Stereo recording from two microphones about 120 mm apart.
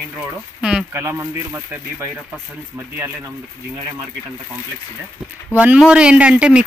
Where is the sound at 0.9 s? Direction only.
20° right (ahead or behind).